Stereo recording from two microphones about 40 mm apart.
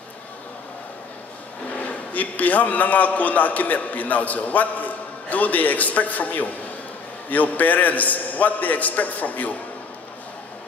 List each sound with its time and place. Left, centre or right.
1.8 s a man's voice: left